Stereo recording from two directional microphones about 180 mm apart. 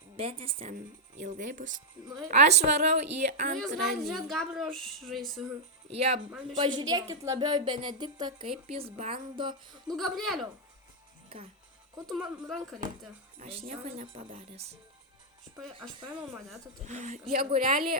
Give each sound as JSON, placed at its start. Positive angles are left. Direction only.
{"t": 0.2, "sound": "speech", "side_deg": -30}
{"t": 1.2, "sound": "speech", "side_deg": -45}
{"t": 3.6, "sound": "a woman's voice", "side_deg": 0}
{"t": 5.9, "sound": "speech", "side_deg": -35}
{"t": 9.9, "sound": "a woman's voice", "side_deg": 0}
{"t": 12.0, "sound": "a woman's voice", "side_deg": -5}
{"t": 13.4, "sound": "speech", "side_deg": -35}
{"t": 16.8, "sound": "speech", "side_deg": -40}
{"t": 17.6, "sound": "speech", "side_deg": -50}